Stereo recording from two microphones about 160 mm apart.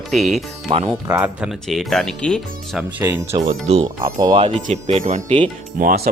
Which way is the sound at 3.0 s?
15° right (ahead or behind).